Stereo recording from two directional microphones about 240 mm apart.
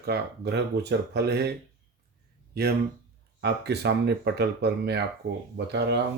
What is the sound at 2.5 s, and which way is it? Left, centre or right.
Speech, right.